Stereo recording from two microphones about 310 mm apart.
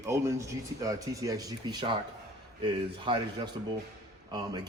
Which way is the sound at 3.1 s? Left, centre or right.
Centre.